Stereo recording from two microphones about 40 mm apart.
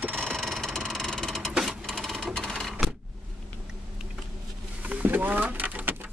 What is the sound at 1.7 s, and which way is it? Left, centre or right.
Cash register, centre.